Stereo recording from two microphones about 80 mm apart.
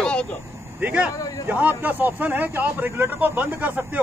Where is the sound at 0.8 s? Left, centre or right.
Centre.